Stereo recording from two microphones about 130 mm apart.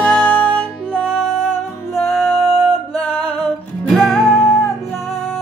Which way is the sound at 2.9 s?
50° left (ahead or behind).